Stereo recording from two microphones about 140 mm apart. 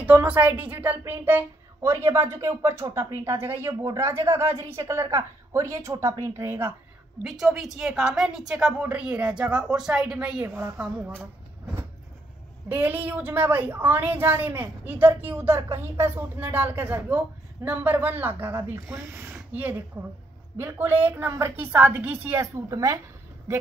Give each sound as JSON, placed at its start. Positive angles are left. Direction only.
{"t": 0.0, "sound": "a woman's voice", "side_deg": -10}
{"t": 7.2, "sound": "a woman's voice", "side_deg": -5}
{"t": 12.6, "sound": "a woman's voice", "side_deg": -15}